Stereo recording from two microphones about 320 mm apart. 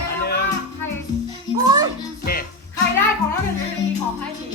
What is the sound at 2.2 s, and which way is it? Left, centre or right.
Music, left.